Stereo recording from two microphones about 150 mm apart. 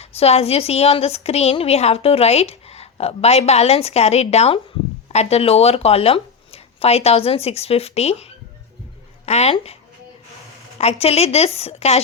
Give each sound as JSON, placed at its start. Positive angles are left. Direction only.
{"t": 0.0, "sound": "a woman's voice", "side_deg": 45}
{"t": 10.8, "sound": "a woman's voice", "side_deg": 45}